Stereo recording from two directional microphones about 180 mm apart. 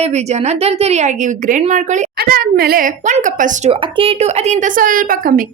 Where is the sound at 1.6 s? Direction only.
45° right (ahead or behind).